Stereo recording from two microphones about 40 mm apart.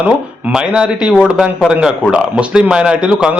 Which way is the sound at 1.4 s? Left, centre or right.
Centre.